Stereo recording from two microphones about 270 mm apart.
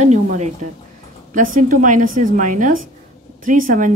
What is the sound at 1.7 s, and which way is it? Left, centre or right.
A woman's voice, right.